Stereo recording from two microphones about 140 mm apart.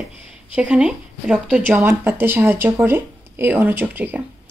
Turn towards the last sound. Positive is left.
turn(degrees=-15)  # may be behind; listen again after turning